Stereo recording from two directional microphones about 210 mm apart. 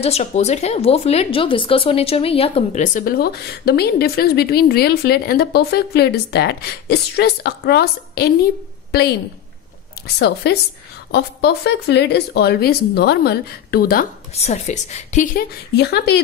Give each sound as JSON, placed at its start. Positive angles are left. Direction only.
{"t": 0.0, "sound": "speech", "side_deg": 30}
{"t": 10.1, "sound": "speech", "side_deg": 50}
{"t": 14.3, "sound": "a woman's voice", "side_deg": 30}
{"t": 15.7, "sound": "speech", "side_deg": 50}